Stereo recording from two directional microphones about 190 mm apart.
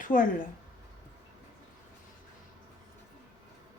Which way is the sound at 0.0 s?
45° left (ahead or behind).